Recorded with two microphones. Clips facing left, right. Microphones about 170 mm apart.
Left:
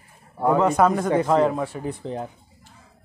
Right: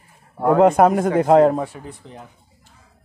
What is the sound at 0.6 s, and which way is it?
Speech, 55° right (ahead or behind).